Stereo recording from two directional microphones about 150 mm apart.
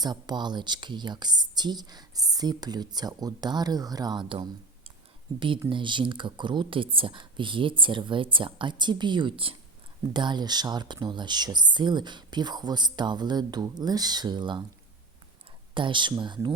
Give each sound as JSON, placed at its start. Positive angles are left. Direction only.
{"t": 0.0, "sound": "speech", "side_deg": -30}
{"t": 15.7, "sound": "speech", "side_deg": -35}